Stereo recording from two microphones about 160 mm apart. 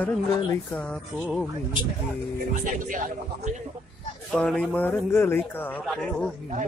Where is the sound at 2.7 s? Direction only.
55° right (ahead or behind).